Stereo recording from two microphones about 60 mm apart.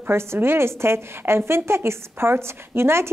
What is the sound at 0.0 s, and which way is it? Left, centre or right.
A woman's voice, right.